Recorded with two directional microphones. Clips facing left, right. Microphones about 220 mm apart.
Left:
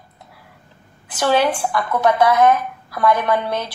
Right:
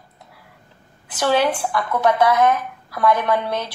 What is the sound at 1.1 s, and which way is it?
A woman's voice, 45° left (ahead or behind).